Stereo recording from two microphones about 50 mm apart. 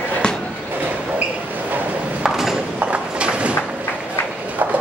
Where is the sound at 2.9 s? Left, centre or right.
Right.